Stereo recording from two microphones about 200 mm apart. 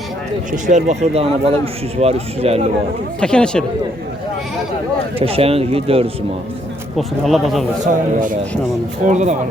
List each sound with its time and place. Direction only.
0.5 s speech: 40° right (ahead or behind)
3.2 s speech: 5° left (ahead or behind)
5.2 s a man's voice: 30° right (ahead or behind)
6.9 s speech: centre (ahead or behind)
9.0 s speech: 35° right (ahead or behind)